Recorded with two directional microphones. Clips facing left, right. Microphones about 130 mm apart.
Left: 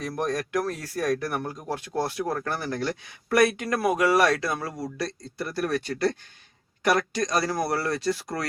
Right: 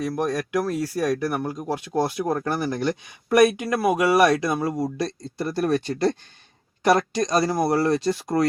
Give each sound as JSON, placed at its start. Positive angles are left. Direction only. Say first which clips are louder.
{"t": 0.2, "sound": "speech", "louder": "even", "side_deg": -10}